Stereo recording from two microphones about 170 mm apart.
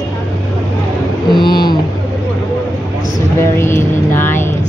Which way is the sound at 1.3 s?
25° left (ahead or behind).